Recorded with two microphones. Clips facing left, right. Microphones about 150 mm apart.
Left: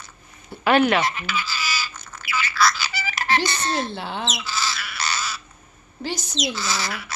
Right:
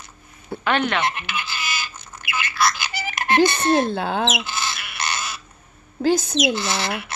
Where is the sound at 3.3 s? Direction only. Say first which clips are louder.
Right 8 dB; 55° right (ahead or behind).